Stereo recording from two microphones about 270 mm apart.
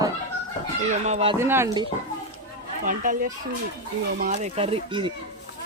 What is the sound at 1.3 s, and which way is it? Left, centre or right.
Speech, centre.